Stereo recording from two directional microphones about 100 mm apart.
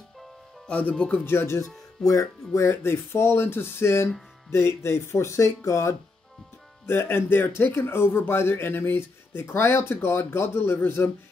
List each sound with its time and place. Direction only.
0.7 s speech: 15° left (ahead or behind)